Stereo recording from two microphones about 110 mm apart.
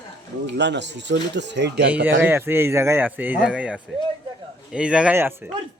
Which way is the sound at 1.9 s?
15° right (ahead or behind).